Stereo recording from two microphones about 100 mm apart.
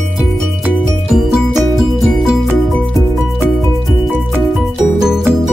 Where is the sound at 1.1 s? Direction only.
Centre (ahead or behind).